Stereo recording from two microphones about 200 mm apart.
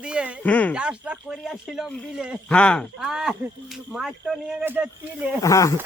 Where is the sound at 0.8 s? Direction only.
5° right (ahead or behind).